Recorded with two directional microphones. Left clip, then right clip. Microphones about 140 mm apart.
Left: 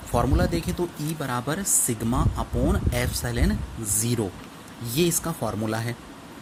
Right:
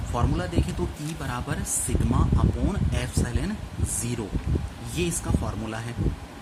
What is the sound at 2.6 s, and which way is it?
Speech, 40° left (ahead or behind).